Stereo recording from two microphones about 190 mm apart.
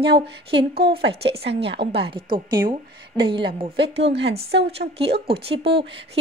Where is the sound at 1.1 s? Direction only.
30° right (ahead or behind).